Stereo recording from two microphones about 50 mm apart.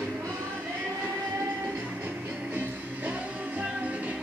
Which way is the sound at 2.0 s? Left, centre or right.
Right.